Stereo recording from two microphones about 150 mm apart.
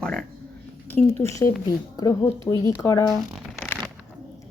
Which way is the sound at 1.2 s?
20° left (ahead or behind).